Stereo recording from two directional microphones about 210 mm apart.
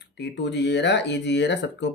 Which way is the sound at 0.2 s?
55° left (ahead or behind).